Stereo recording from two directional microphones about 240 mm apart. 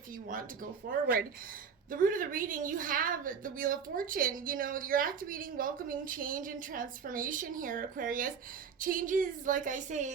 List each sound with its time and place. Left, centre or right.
0.3 s a woman's voice: right